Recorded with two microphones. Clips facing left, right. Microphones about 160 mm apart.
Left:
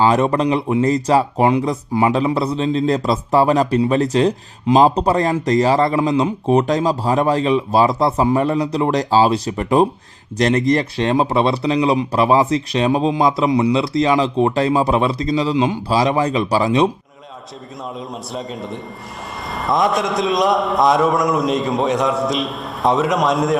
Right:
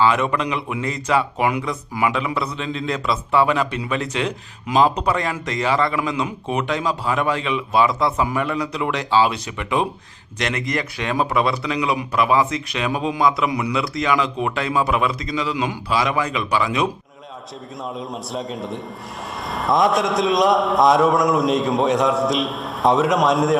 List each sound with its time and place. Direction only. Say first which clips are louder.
0.0 s speech: left 4 dB; 35° left (ahead or behind)
18.3 s a man's voice: even; centre (ahead or behind)